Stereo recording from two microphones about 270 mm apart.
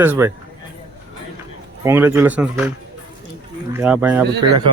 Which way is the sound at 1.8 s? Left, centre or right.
Centre.